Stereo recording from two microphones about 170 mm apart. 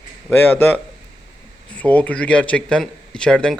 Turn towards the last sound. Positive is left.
turn(degrees=5)  # may be behind; listen again after turning